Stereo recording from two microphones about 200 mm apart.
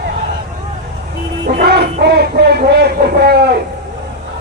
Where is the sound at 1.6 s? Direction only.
55° right (ahead or behind).